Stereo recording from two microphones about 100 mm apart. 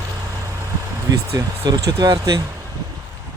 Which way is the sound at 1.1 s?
35° right (ahead or behind).